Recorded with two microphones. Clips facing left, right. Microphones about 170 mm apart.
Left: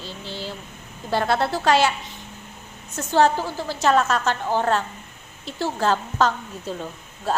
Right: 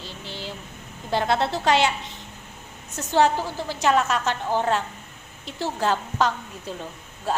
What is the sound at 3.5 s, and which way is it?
Speech, 15° right (ahead or behind).